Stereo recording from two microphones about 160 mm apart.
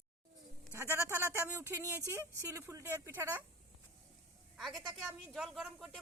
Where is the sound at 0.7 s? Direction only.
15° right (ahead or behind).